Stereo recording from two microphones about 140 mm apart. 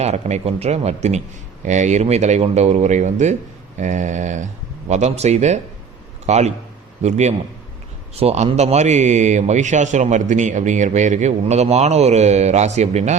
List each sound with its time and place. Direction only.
0.0 s a man's voice: 55° right (ahead or behind)